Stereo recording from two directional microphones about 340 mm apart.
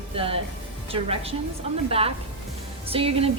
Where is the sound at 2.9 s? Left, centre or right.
Centre.